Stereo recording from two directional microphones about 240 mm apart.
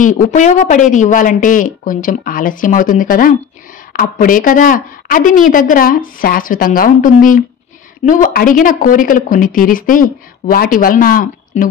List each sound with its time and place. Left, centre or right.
0.0 s speech: left